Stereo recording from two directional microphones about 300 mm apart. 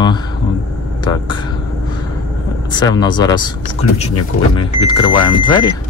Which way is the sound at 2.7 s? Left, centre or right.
Centre.